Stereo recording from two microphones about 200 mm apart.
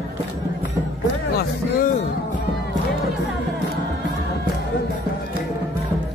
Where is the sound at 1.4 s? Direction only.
45° left (ahead or behind).